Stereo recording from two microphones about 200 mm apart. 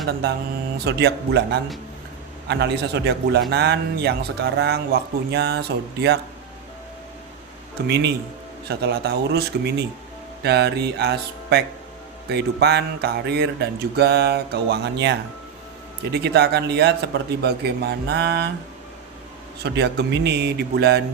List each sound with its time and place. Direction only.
0.9 s speech: 55° right (ahead or behind)
7.8 s speech: 55° right (ahead or behind)
19.6 s speech: 60° right (ahead or behind)